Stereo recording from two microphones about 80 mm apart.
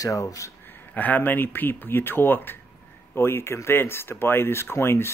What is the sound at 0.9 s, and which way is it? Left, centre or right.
Speech, left.